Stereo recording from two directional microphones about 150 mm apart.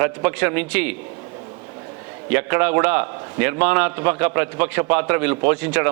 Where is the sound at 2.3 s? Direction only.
10° right (ahead or behind).